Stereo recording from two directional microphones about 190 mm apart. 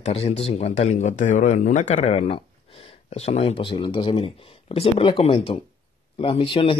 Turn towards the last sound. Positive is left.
turn(degrees=30)  # may be behind; listen again after turning